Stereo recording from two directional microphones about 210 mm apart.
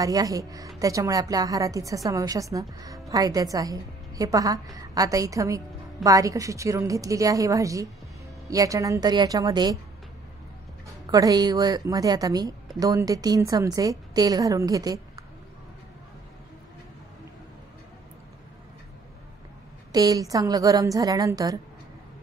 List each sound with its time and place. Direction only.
0.0 s a woman's voice: 15° right (ahead or behind)
11.1 s a woman's voice: 15° right (ahead or behind)
19.9 s a woman's voice: 15° right (ahead or behind)